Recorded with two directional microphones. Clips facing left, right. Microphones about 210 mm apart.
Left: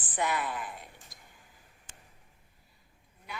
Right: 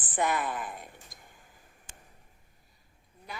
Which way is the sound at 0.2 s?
45° right (ahead or behind).